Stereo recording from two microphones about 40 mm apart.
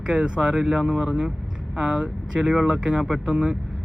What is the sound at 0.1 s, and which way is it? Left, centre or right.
Speech, right.